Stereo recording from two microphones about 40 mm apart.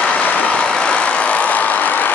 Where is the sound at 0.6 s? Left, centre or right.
Centre; by 2.1 s left.